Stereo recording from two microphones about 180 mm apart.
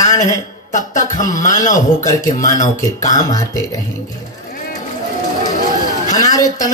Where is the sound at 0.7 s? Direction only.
45° left (ahead or behind).